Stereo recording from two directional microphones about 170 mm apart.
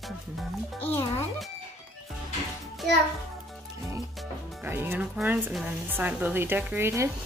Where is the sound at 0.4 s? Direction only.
10° left (ahead or behind).